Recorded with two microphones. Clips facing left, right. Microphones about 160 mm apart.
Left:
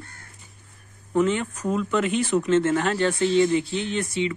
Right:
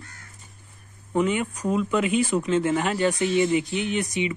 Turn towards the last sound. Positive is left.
turn(degrees=-15)  # may be behind; listen again after turning